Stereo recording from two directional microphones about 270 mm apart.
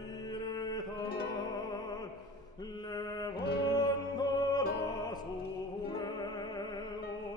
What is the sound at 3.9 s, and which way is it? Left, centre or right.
Music, centre.